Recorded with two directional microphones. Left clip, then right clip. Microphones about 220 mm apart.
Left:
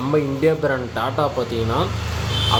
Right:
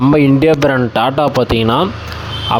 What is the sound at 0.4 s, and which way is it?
Speech, 45° right (ahead or behind).